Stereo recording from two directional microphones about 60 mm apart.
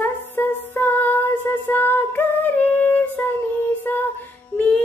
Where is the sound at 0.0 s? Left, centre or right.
Left.